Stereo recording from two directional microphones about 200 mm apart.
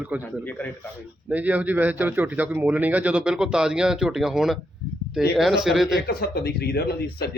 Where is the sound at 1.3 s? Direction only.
5° right (ahead or behind).